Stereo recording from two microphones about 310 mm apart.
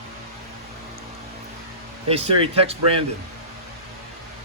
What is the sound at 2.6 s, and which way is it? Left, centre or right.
Speech, centre.